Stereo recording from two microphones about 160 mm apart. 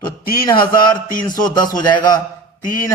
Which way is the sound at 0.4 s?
30° left (ahead or behind).